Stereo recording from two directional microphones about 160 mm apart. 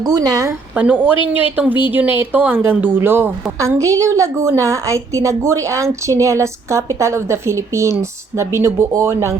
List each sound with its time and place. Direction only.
0.0 s a woman's voice: 25° right (ahead or behind)
0.8 s a woman's voice: 10° right (ahead or behind)